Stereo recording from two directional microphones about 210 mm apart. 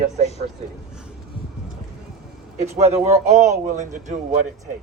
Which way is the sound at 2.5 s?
30° right (ahead or behind).